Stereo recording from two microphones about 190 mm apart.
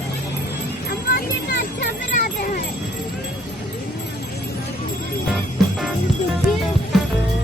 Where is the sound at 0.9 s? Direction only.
55° left (ahead or behind).